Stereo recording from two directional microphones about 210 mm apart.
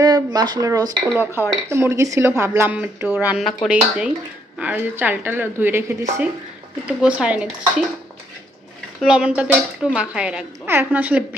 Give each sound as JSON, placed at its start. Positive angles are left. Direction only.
{"t": 0.0, "sound": "speech", "side_deg": -20}
{"t": 9.0, "sound": "speech", "side_deg": -5}